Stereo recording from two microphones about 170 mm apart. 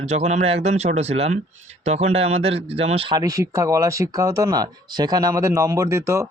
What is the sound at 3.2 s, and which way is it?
Speech, 20° right (ahead or behind).